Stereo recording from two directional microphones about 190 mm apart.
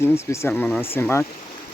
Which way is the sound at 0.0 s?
15° left (ahead or behind).